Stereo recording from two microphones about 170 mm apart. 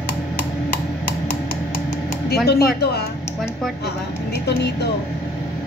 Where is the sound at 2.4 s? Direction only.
65° left (ahead or behind).